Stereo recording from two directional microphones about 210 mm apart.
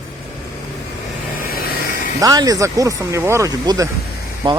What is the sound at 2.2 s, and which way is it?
Speech, 15° right (ahead or behind).